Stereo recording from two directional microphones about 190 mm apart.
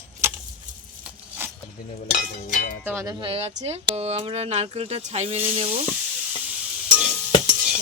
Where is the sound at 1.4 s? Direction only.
10° right (ahead or behind).